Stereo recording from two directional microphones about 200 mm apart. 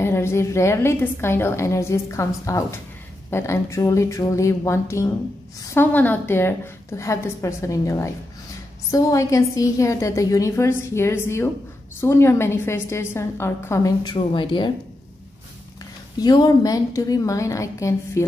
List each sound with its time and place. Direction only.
0.0 s a woman's voice: 15° left (ahead or behind)
16.2 s a woman's voice: 20° left (ahead or behind)